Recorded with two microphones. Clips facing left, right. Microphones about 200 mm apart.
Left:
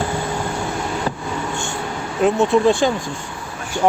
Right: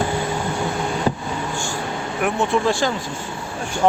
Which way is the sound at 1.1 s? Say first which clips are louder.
Right 3 dB; 15° right (ahead or behind).